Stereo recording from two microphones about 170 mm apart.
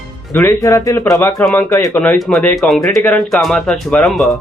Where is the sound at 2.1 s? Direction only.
Centre (ahead or behind).